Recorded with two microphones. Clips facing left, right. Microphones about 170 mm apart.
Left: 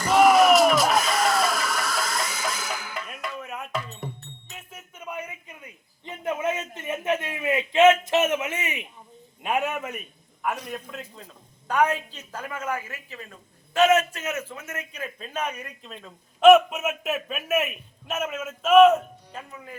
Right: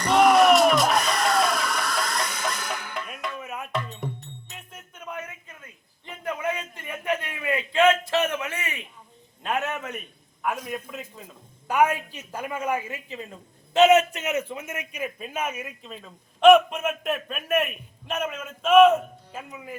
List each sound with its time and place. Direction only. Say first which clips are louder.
0.0 s music: even; centre (ahead or behind)
4.4 s a sound: left 1 dB; 5° left (ahead or behind)
10.7 s a woman's voice: right 2 dB; 5° right (ahead or behind)